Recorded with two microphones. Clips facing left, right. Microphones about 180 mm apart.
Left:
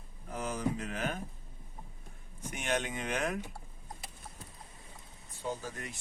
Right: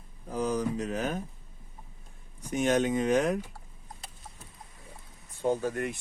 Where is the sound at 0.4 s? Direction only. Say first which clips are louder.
Right 5 dB; 40° right (ahead or behind).